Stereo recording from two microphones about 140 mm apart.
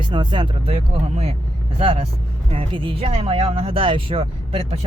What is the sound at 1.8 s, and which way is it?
Speech, 40° right (ahead or behind).